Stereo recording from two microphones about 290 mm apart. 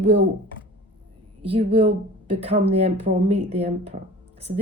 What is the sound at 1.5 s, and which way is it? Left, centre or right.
Speech, centre.